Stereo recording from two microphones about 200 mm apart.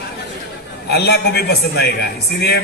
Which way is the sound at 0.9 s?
55° left (ahead or behind).